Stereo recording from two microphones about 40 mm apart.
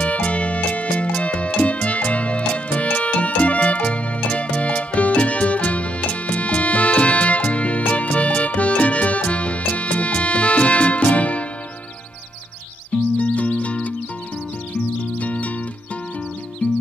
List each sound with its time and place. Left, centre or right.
0.0 s music: left
13.2 s music: left
15.1 s music: left
16.6 s music: left